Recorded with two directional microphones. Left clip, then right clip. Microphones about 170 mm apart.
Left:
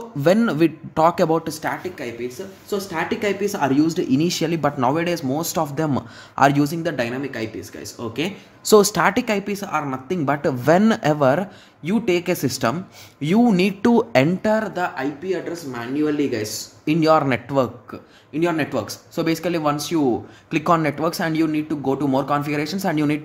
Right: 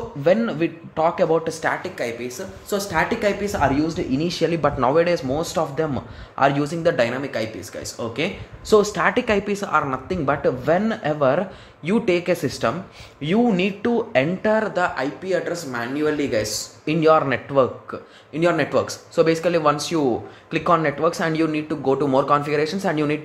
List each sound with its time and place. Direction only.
0.2 s a man's voice: 45° left (ahead or behind)
1.8 s speech: 5° right (ahead or behind); by 3.7 s 20° left (ahead or behind)
3.7 s speech: 30° left (ahead or behind)
6.7 s speech: 10° left (ahead or behind)
8.6 s speech: 40° left (ahead or behind)
9.1 s speech: 15° left (ahead or behind)
10.6 s speech: 40° left (ahead or behind)
11.8 s speech: 10° left (ahead or behind); by 14.3 s 40° left (ahead or behind)
14.4 s speech: 20° left (ahead or behind)
16.8 s speech: 30° left (ahead or behind)
18.3 s speech: 5° left (ahead or behind)
20.5 s speech: 30° left (ahead or behind)